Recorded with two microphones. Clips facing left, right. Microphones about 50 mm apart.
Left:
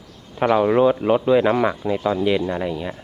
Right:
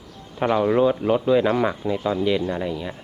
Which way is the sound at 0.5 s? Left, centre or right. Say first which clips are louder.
Left 3 dB; centre.